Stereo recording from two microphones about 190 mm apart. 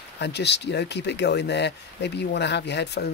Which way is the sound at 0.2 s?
65° left (ahead or behind).